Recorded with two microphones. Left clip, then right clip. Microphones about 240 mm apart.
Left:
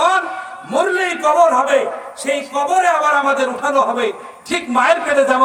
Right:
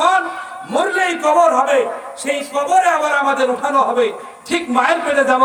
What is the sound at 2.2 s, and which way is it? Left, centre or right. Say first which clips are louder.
Speech: even; centre.